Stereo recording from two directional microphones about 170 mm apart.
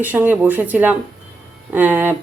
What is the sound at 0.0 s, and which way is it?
Speech, 10° right (ahead or behind).